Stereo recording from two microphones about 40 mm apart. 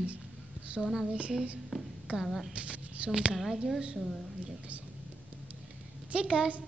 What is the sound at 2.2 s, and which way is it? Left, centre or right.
Speech, centre.